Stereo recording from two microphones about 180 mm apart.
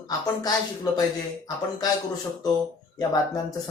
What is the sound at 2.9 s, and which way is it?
Speech, 20° left (ahead or behind).